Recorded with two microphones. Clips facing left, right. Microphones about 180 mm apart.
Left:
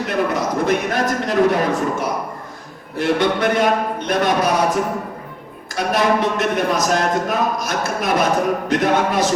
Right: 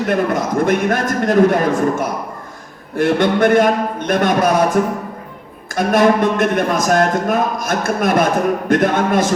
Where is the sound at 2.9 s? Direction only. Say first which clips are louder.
Right 3 dB; 50° right (ahead or behind).